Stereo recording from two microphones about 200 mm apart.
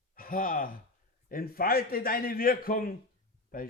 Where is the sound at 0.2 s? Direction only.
45° left (ahead or behind).